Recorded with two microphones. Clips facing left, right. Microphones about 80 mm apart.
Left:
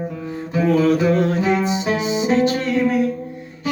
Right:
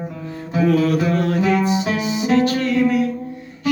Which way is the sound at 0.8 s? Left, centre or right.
Left.